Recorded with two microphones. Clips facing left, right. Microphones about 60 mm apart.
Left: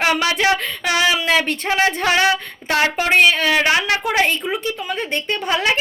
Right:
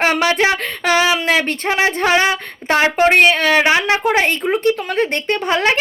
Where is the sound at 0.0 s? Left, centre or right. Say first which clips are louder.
Right 3 dB; right.